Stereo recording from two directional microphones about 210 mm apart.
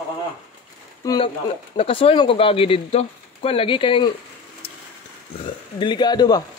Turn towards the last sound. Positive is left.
turn(degrees=20)  # may be behind; listen again after turning